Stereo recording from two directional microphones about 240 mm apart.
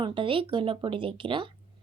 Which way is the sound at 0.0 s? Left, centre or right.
Right.